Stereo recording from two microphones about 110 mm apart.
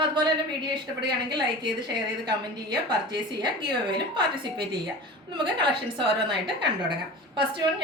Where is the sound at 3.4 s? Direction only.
45° right (ahead or behind).